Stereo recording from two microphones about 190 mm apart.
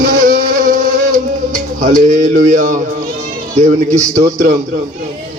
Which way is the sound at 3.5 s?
40° right (ahead or behind).